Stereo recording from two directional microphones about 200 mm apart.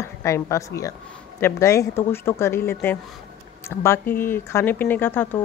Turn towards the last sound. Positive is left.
turn(degrees=10)  # may be behind; listen again after turning